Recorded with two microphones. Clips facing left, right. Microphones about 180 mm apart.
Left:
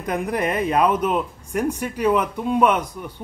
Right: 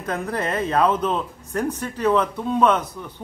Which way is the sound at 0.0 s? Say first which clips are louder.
Left 2 dB; 15° left (ahead or behind).